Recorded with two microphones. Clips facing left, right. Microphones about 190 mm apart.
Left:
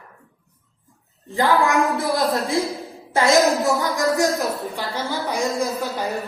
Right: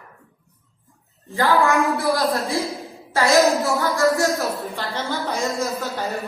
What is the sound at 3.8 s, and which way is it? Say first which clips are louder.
A woman's voice: right 1 dB; 15° left (ahead or behind).